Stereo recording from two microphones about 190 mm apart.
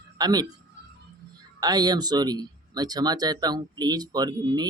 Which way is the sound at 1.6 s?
20° right (ahead or behind).